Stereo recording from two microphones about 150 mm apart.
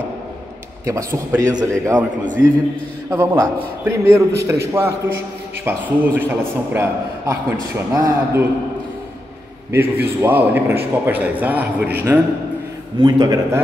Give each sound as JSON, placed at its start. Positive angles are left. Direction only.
{"t": 0.8, "sound": "a man's voice", "side_deg": -20}
{"t": 3.1, "sound": "a man's voice", "side_deg": -15}
{"t": 9.7, "sound": "a man's voice", "side_deg": -15}
{"t": 13.0, "sound": "a man's voice", "side_deg": -25}